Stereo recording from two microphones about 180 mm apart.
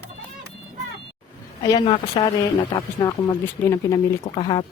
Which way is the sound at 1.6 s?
25° left (ahead or behind).